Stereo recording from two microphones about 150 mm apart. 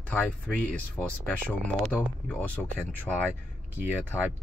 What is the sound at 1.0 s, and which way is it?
Speech, 10° left (ahead or behind).